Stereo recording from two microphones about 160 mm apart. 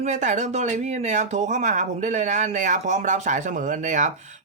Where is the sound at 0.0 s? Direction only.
45° right (ahead or behind).